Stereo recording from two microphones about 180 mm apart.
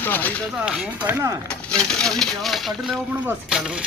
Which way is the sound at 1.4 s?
5° left (ahead or behind).